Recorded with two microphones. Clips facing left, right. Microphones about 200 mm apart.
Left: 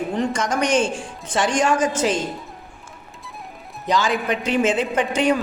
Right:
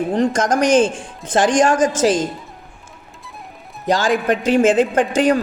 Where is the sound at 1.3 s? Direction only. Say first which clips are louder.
Right 5 dB; 90° right.